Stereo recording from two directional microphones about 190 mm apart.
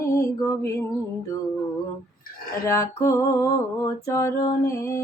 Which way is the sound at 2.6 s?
15° left (ahead or behind).